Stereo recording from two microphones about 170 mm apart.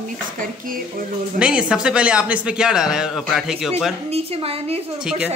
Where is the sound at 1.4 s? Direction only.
5° right (ahead or behind).